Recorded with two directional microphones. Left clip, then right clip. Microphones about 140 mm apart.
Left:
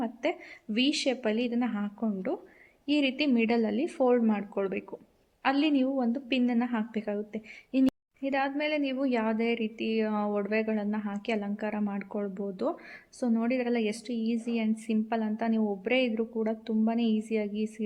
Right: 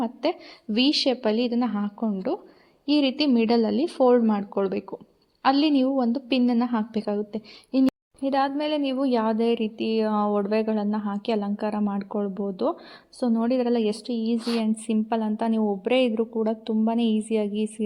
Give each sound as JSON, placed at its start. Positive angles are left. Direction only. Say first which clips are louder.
{"t": 0.0, "sound": "a woman's voice", "louder": "right 5 dB", "side_deg": -35}